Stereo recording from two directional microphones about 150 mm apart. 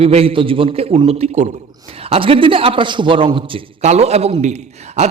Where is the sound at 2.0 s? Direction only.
40° right (ahead or behind).